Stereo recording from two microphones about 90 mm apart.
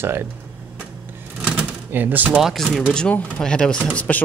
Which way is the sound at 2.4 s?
Centre (ahead or behind).